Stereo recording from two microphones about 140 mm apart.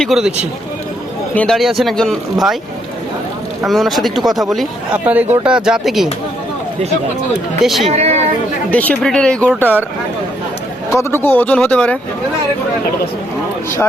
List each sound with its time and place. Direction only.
0.0 s speech: 5° right (ahead or behind)
1.4 s speech: centre (ahead or behind)
3.7 s speech: centre (ahead or behind)
7.6 s speech: centre (ahead or behind)
7.9 s speech: 50° right (ahead or behind)
8.7 s speech: 10° left (ahead or behind)
10.9 s speech: 15° left (ahead or behind)